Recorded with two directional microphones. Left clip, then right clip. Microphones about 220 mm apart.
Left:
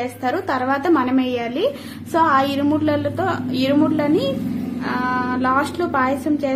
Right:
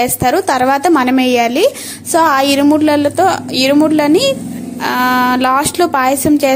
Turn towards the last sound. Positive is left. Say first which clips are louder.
# right 9 dB
turn(degrees=-40)  # may be behind; listen again after turning